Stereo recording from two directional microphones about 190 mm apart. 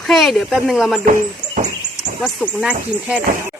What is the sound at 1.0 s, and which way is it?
Speech, 45° right (ahead or behind).